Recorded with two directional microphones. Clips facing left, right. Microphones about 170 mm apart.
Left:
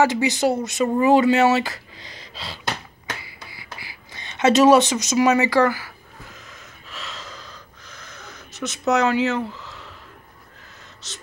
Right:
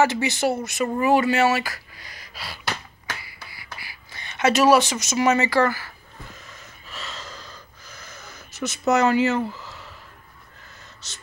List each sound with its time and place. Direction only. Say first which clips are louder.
0.0 s speech: left 2 dB; 15° left (ahead or behind)
3.1 s a sound: left 2 dB; 20° left (ahead or behind)
6.5 s gasp: left 1 dB; centre (ahead or behind)
11.0 s speech: left 8 dB; centre (ahead or behind)